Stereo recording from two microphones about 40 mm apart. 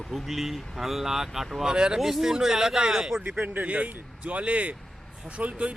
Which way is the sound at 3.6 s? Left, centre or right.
Right.